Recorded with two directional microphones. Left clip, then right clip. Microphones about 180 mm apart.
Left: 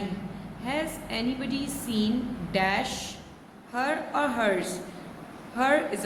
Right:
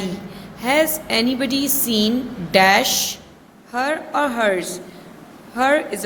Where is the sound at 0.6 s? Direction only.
50° right (ahead or behind).